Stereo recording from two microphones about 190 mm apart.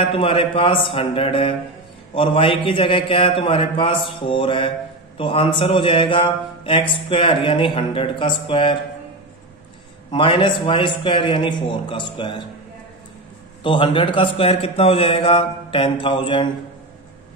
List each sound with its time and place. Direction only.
0.1 s a man's voice: 30° left (ahead or behind)
10.1 s a man's voice: 25° left (ahead or behind)
13.6 s a man's voice: 25° left (ahead or behind)